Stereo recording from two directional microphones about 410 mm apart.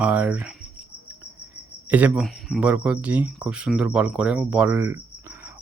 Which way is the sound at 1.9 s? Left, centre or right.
Centre.